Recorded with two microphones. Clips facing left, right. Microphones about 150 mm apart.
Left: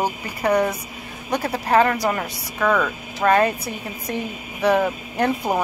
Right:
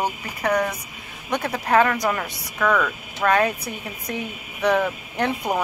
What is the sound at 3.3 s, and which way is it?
Speech, 5° left (ahead or behind).